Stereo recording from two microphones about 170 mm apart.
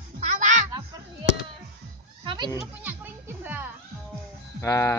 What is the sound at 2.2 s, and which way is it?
Children playing, 25° right (ahead or behind).